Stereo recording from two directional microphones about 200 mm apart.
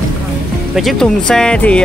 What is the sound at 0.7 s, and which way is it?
Speech, centre (ahead or behind).